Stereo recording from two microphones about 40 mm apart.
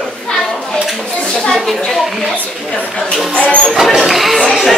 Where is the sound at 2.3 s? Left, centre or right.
Left.